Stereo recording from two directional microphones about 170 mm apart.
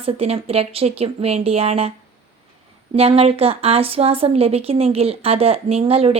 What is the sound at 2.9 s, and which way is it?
Speech, 35° right (ahead or behind).